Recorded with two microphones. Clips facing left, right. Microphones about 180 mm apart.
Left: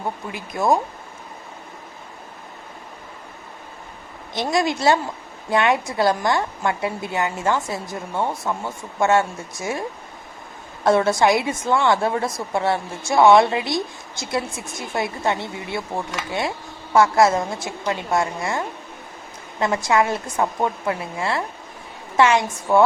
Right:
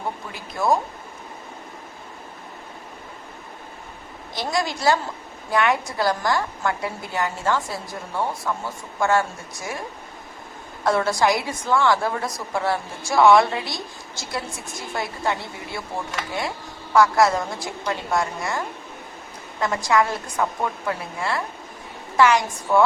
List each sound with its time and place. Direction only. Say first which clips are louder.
4.4 s a woman's voice: left 4 dB; 20° left (ahead or behind)
10.8 s a woman's voice: left 3 dB; 20° left (ahead or behind)
16.9 s a woman's voice: left 1 dB; 25° left (ahead or behind)